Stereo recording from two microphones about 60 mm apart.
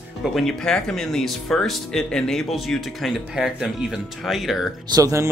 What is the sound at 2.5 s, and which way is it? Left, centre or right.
Speech, centre.